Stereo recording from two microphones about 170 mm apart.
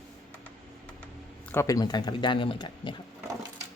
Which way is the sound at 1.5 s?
15° left (ahead or behind).